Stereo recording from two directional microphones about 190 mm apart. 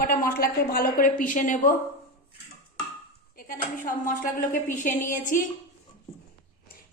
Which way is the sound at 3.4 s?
50° left (ahead or behind).